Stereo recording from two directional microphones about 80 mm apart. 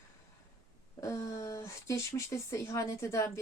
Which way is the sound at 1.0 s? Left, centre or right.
Left.